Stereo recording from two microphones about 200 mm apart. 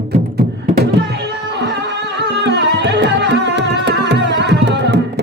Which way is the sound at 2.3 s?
60° right (ahead or behind).